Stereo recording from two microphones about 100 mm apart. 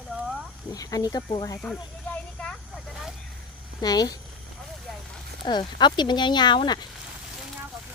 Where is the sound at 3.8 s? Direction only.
40° left (ahead or behind).